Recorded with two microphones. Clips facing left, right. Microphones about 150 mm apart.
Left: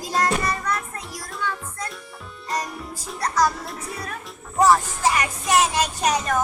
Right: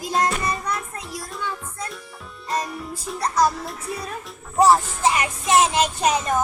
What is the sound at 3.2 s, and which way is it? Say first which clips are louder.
Music: right 1 dB; 25° right (ahead or behind).